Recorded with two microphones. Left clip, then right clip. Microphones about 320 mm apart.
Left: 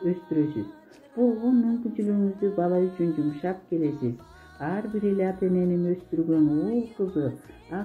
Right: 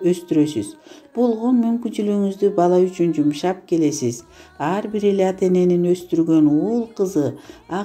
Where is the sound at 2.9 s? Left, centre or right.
Centre.